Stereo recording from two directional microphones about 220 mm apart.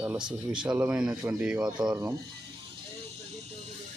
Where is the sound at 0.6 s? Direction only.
5° right (ahead or behind).